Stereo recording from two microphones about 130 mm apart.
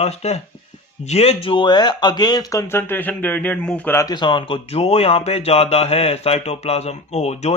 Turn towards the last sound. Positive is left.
turn(degrees=60)  # may be behind; listen again after turning